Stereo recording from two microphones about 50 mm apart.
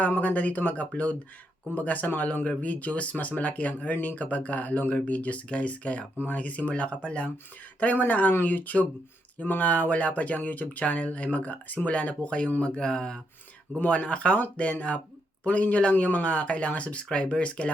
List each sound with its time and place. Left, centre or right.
0.2 s speech: left
7.8 s speech: left